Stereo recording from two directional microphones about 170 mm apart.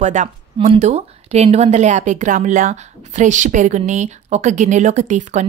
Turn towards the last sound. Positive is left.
turn(degrees=-45)  # may be behind; listen again after turning